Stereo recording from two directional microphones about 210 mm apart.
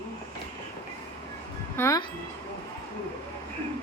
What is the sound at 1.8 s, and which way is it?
Speech, 15° left (ahead or behind).